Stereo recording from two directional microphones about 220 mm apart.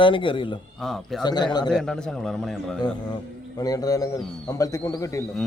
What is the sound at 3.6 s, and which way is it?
Speech, 15° left (ahead or behind).